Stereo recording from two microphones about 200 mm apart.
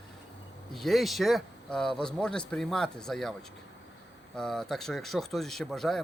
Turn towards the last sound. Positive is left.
turn(degrees=0)  # may be behind; listen again after turning